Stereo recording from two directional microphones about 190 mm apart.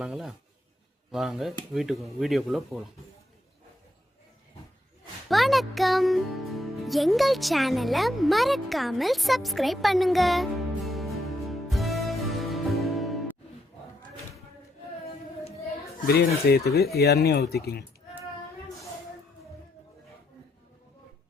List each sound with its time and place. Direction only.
0.0 s speech: centre (ahead or behind)
5.3 s music: centre (ahead or behind)
16.0 s speech: 55° left (ahead or behind)